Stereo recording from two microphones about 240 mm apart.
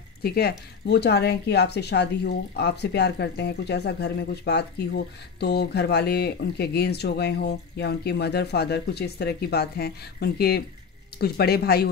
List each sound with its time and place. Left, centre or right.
0.2 s speech: left